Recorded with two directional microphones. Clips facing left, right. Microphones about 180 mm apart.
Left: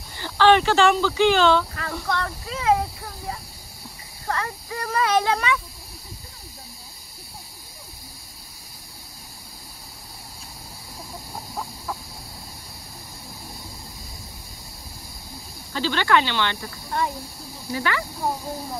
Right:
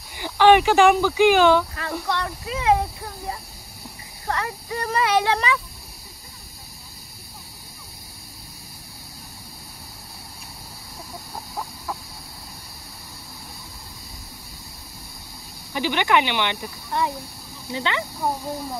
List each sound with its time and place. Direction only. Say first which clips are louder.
0.1 s a sound: right 2 dB; 15° right (ahead or behind)
4.3 s speech: right 1 dB; 15° right (ahead or behind)
15.7 s speech: even; 15° right (ahead or behind)